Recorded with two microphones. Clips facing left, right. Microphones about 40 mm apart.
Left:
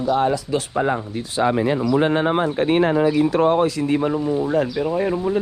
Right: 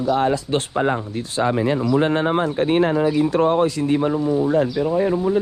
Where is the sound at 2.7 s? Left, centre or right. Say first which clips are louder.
Left 1 dB; left.